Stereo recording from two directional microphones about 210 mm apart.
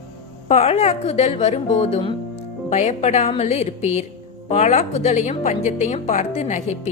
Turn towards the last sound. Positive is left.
turn(degrees=35)  # may be behind; listen again after turning